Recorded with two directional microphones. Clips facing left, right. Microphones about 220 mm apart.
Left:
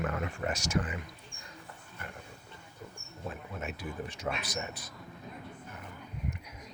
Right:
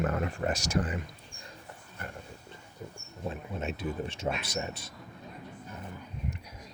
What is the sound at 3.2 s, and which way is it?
Speech, 25° right (ahead or behind).